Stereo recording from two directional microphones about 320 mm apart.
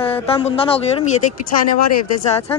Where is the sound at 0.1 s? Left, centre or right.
Centre.